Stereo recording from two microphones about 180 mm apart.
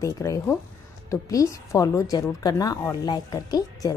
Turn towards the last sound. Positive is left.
turn(degrees=20)  # may be behind; listen again after turning